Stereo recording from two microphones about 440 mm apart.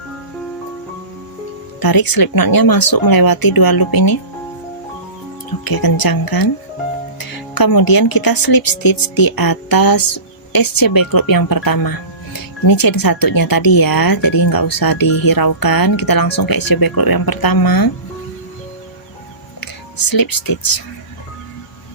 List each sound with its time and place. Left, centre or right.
1.8 s speech: left
5.6 s speech: left
19.5 s speech: left